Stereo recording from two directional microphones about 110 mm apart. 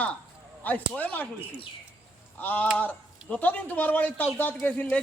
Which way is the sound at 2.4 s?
15° left (ahead or behind).